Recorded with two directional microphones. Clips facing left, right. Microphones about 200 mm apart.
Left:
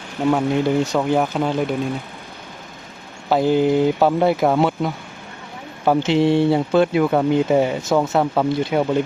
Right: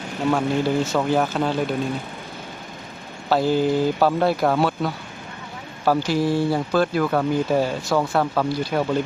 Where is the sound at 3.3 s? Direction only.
20° left (ahead or behind).